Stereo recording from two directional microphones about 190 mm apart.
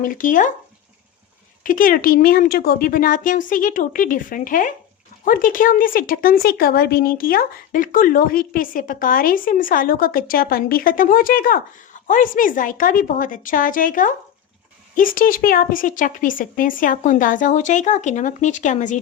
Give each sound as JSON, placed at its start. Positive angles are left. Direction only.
{"t": 0.0, "sound": "speech", "side_deg": 45}
{"t": 1.6, "sound": "speech", "side_deg": 45}